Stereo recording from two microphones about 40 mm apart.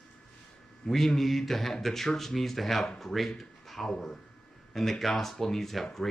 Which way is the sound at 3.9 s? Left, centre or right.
Centre.